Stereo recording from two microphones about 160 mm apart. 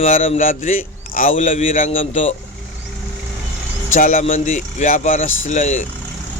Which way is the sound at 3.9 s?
55° left (ahead or behind).